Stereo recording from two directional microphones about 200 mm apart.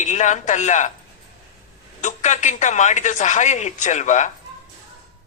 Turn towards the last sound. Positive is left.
turn(degrees=35)  # may be behind; listen again after turning